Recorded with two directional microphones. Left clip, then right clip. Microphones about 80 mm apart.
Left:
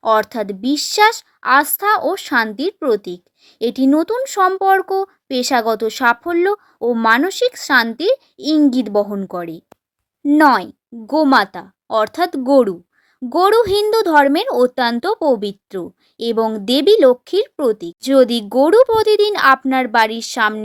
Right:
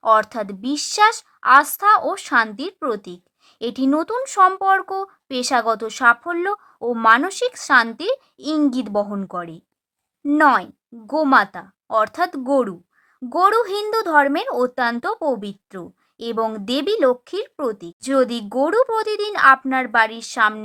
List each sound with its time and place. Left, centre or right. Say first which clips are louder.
0.0 s a woman's voice: left 1 dB; centre
6.7 s a woman's voice: even; centre; by 15.9 s left
16.1 s speech: left 5 dB; centre